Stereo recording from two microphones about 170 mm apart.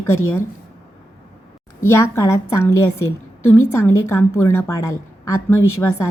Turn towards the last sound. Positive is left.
turn(degrees=15)  # may be behind; listen again after turning